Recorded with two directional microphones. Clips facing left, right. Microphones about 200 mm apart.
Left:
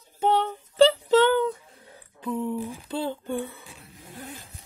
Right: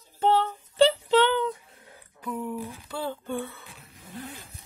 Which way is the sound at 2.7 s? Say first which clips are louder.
Left 3 dB; 15° left (ahead or behind).